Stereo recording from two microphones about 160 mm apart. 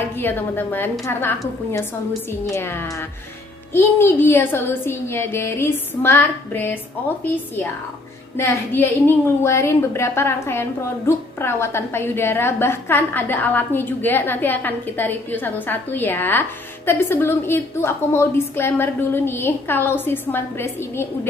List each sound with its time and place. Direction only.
0.2 s a woman's voice: 10° left (ahead or behind)
2.4 s a woman's voice: 15° left (ahead or behind)
8.4 s a woman's voice: 15° left (ahead or behind)